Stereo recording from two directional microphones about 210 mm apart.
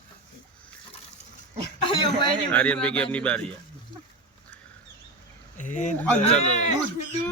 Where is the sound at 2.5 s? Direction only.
5° left (ahead or behind).